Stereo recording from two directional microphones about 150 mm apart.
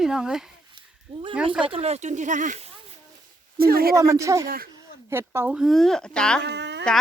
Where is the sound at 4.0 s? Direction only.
20° right (ahead or behind).